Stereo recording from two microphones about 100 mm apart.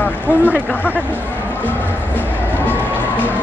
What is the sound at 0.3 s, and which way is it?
Speech, 15° right (ahead or behind).